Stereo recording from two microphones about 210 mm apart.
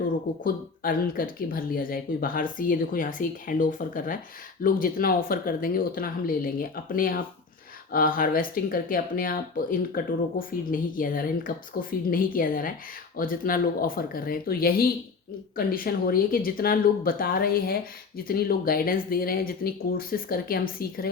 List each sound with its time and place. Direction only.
0.4 s speech: 45° left (ahead or behind)